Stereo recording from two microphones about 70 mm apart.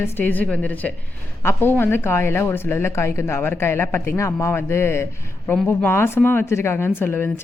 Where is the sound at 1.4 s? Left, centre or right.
Left.